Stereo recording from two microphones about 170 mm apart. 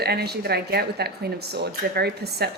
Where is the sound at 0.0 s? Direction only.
70° right (ahead or behind).